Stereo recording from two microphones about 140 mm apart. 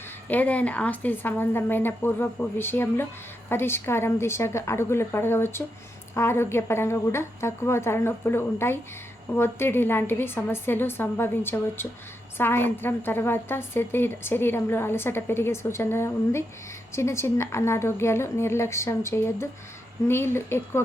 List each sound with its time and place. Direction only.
0.3 s a woman's voice: 10° left (ahead or behind)